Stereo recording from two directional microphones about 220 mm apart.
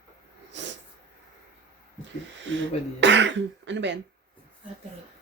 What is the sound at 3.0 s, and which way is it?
Speech, 55° right (ahead or behind).